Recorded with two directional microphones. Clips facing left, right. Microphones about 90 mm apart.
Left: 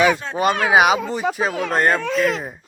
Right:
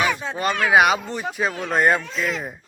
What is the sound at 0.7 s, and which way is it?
Speech, 5° left (ahead or behind).